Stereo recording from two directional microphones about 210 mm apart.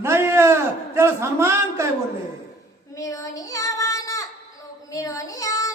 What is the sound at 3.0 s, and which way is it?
Child singing, 15° left (ahead or behind).